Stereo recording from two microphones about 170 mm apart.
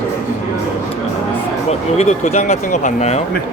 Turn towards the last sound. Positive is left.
turn(degrees=40)  # may be behind; listen again after turning